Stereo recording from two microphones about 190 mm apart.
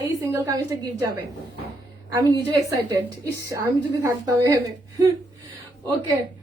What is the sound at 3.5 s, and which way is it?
A woman's voice, 15° right (ahead or behind).